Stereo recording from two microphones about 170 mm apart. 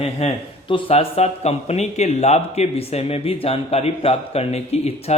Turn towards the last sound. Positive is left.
turn(degrees=40)  # may be behind; listen again after turning